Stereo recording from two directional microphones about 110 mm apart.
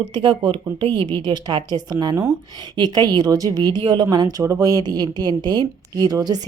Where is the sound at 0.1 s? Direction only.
50° right (ahead or behind).